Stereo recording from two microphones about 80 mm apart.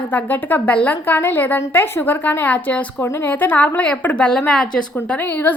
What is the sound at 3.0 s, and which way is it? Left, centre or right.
A woman's voice, left.